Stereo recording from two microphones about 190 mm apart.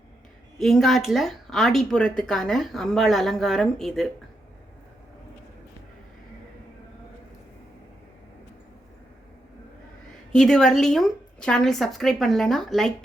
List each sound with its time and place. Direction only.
0.6 s a woman's voice: centre (ahead or behind)
10.3 s a woman's voice: 5° left (ahead or behind)